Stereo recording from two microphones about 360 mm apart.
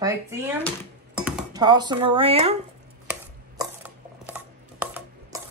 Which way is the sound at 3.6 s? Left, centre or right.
Centre.